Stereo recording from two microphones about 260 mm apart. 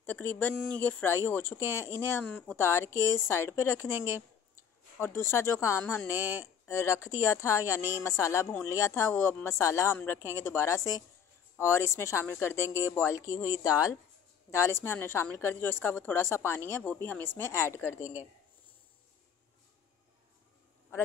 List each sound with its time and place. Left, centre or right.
0.0 s a woman's voice: centre
6.1 s speech: centre
6.4 s a woman's voice: centre